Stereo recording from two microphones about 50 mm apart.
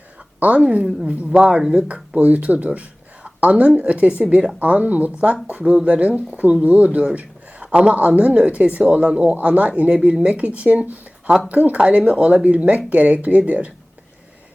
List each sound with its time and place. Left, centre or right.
0.3 s speech: right
0.9 s speech: centre
1.3 s a woman's voice: right